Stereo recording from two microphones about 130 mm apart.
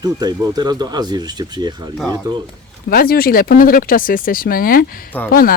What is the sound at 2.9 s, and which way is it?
Speech, 90° left.